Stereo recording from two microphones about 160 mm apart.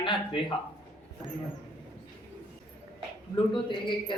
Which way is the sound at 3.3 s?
30° left (ahead or behind).